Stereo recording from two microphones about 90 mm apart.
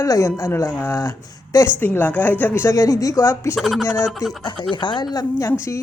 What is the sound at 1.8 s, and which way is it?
Speech, 20° left (ahead or behind).